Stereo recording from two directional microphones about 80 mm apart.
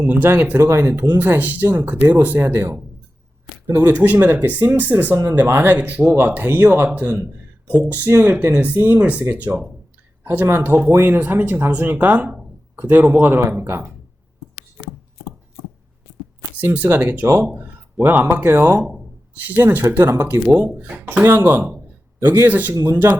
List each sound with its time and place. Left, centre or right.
0.0 s speech: right
3.9 s speech: right
16.7 s speech: right
18.8 s speech: centre
19.3 s speech: right
20.5 s speech: centre
20.7 s speech: right
22.7 s speech: right